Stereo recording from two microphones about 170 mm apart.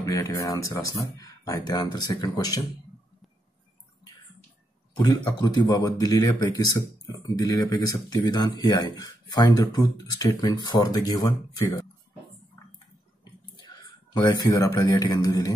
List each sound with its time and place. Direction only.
0.0 s speech: 20° left (ahead or behind)
5.0 s speech: 25° left (ahead or behind)
14.1 s speech: 25° left (ahead or behind)